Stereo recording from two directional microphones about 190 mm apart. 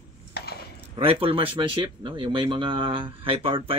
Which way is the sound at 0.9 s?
30° right (ahead or behind).